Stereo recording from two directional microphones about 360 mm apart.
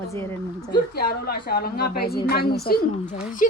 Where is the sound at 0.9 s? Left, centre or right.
Left.